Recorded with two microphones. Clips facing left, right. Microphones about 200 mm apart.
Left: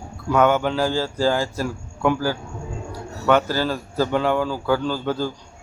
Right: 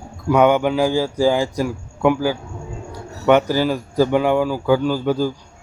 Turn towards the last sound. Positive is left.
turn(degrees=-10)  # may be behind; listen again after turning